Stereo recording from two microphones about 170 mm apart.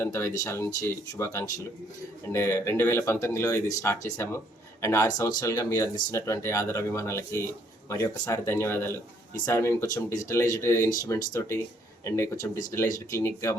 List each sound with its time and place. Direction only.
0.0 s speech: 15° left (ahead or behind)